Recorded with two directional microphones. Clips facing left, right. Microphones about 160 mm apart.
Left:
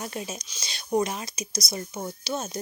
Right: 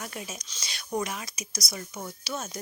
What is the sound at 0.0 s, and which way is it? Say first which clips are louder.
Speech: left 4 dB; 30° left (ahead or behind).